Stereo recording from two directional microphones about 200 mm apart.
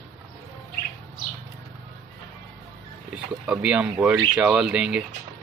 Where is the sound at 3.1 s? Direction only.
5° right (ahead or behind).